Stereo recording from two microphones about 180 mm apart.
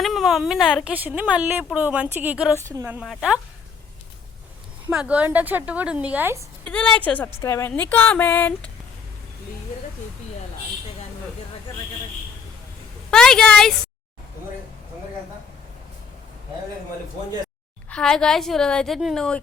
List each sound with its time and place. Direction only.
0.0 s a woman's voice: centre (ahead or behind)
3.0 s speech: centre (ahead or behind)
4.9 s a woman's voice: 5° right (ahead or behind)
6.7 s speech: 5° left (ahead or behind)
13.1 s a woman's voice: 5° left (ahead or behind)
17.8 s speech: 5° left (ahead or behind)